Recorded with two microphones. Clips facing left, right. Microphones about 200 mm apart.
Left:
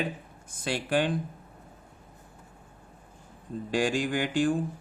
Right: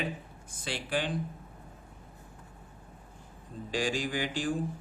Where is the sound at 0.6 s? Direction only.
55° left (ahead or behind).